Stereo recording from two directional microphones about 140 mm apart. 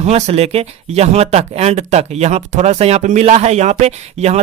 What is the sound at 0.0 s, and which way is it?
Speech, 50° right (ahead or behind).